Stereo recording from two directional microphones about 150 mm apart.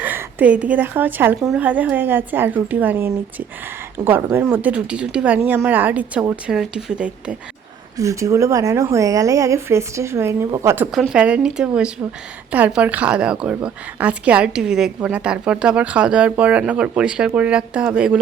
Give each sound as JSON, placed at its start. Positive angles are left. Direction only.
{"t": 0.0, "sound": "a woman's voice", "side_deg": -15}
{"t": 7.9, "sound": "a woman's voice", "side_deg": -20}
{"t": 10.9, "sound": "a woman's voice", "side_deg": -5}